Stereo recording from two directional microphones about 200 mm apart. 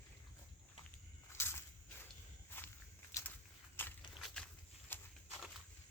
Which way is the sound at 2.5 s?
10° left (ahead or behind).